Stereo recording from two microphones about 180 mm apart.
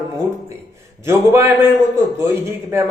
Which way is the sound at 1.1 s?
15° right (ahead or behind).